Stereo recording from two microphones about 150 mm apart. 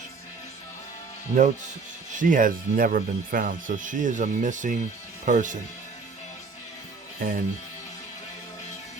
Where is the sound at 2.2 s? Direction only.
65° right (ahead or behind).